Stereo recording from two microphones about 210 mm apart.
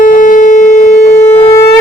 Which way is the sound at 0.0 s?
40° left (ahead or behind).